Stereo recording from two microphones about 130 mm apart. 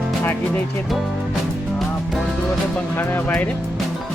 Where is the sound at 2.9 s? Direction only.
15° left (ahead or behind).